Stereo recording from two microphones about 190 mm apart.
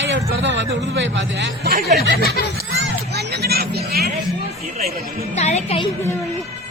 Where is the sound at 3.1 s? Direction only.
60° right (ahead or behind).